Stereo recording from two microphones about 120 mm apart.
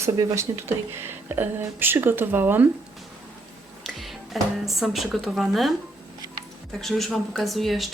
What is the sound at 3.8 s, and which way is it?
Speech, centre (ahead or behind).